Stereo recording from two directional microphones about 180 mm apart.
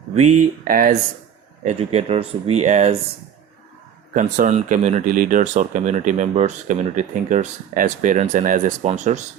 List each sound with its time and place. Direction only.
0.1 s speech: 40° right (ahead or behind)
1.6 s speech: 35° right (ahead or behind)
4.1 s speech: 45° right (ahead or behind)